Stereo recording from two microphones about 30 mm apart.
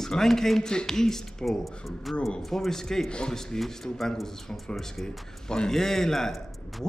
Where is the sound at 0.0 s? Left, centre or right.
Centre.